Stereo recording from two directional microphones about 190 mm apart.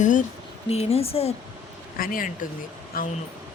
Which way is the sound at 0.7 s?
30° left (ahead or behind).